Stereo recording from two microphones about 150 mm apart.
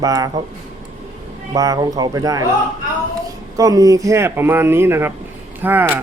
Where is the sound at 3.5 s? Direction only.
25° right (ahead or behind).